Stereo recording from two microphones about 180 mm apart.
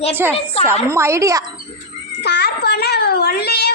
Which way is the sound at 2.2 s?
70° left (ahead or behind).